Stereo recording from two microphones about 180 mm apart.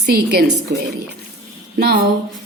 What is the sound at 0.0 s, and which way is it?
Speech, 65° right (ahead or behind).